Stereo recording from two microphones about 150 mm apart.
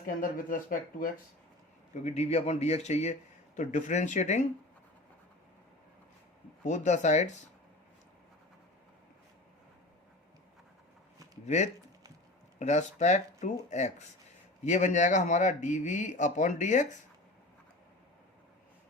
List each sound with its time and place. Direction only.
0.0 s speech: 65° left (ahead or behind)
2.0 s a man's voice: 45° left (ahead or behind)
6.7 s a man's voice: 55° left (ahead or behind)
11.4 s a man's voice: 50° left (ahead or behind)